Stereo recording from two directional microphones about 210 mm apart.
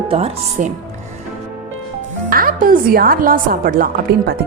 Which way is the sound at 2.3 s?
45° right (ahead or behind).